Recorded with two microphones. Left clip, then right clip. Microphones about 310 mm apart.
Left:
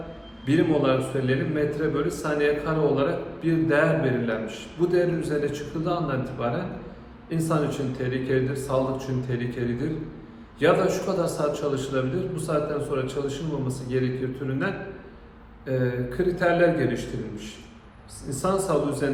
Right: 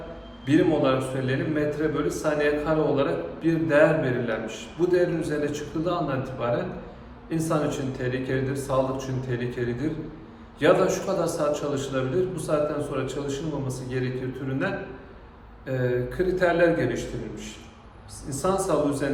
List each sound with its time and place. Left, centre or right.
0.4 s a man's voice: centre
15.6 s a man's voice: centre